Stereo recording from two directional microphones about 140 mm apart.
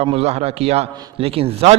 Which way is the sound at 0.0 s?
45° right (ahead or behind).